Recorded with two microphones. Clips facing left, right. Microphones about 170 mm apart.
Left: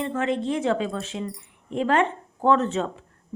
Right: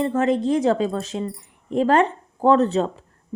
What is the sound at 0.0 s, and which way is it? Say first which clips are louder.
Speech: right 5 dB; 40° right (ahead or behind).